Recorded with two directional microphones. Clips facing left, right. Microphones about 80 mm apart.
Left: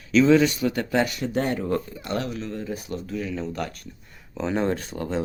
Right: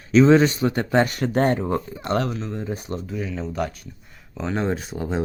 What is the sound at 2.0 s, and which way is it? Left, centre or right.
Speech, right.